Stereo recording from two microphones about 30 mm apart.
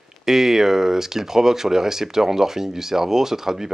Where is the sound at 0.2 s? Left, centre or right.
Centre.